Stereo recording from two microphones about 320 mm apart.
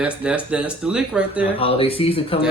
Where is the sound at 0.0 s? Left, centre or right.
Centre.